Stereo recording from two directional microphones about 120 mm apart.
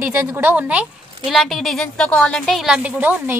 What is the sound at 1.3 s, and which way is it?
A woman's voice, centre (ahead or behind).